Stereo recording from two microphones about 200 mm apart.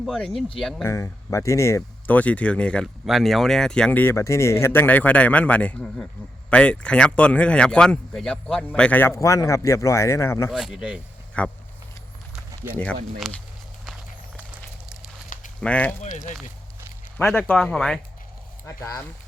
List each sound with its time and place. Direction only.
0.0 s speech: centre (ahead or behind)
0.9 s speech: 15° left (ahead or behind)
10.5 s speech: centre (ahead or behind)
11.4 s speech: 5° left (ahead or behind)
12.7 s speech: 5° left (ahead or behind)
14.3 s a sound: 5° right (ahead or behind)
15.6 s speech: 5° left (ahead or behind)
16.0 s speech: 35° left (ahead or behind)
17.2 s speech: 5° left (ahead or behind)
18.6 s speech: 15° left (ahead or behind)